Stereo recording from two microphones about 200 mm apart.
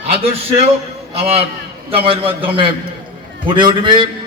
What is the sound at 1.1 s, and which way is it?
A man's voice, 30° right (ahead or behind).